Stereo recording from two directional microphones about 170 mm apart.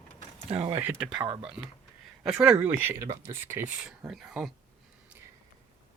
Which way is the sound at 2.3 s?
5° right (ahead or behind).